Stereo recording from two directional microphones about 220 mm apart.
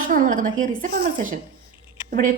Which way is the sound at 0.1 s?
40° right (ahead or behind).